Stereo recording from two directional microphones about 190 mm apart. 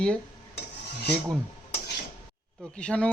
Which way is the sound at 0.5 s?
60° left (ahead or behind).